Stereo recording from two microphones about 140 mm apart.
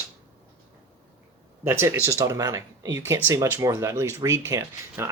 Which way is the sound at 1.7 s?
15° right (ahead or behind).